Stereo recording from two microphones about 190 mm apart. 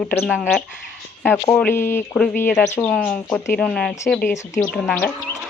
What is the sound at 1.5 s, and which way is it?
A woman's voice, 10° left (ahead or behind).